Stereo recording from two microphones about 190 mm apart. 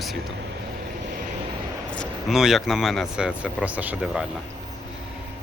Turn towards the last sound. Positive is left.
turn(degrees=-5)  # may be behind; listen again after turning